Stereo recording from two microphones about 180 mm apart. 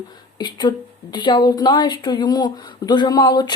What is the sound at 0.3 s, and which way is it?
A woman's voice, 25° left (ahead or behind).